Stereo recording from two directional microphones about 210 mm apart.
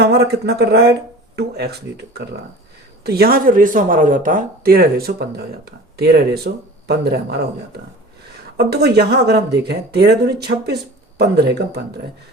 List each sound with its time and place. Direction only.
0.0 s speech: 50° right (ahead or behind)
8.5 s speech: 50° right (ahead or behind)